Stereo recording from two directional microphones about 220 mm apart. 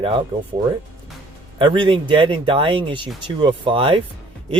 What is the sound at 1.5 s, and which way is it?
Speech, 20° right (ahead or behind).